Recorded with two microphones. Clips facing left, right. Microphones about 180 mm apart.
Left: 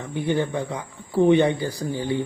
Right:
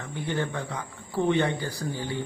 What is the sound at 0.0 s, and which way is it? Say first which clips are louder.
Speech: left 6 dB; 15° left (ahead or behind).